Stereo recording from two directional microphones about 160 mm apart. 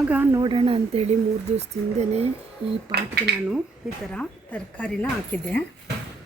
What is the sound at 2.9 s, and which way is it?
Speech, 90° right.